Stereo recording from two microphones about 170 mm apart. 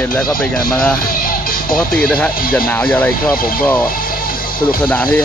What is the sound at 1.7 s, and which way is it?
Speech, 5° left (ahead or behind).